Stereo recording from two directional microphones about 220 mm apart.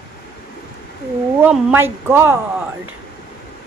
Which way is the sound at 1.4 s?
10° right (ahead or behind).